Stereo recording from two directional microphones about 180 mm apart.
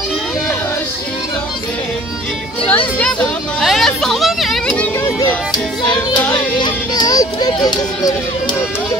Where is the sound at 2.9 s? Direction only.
5° left (ahead or behind).